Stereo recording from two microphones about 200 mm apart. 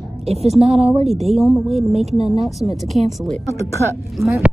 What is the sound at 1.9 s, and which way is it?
Speech, 30° right (ahead or behind).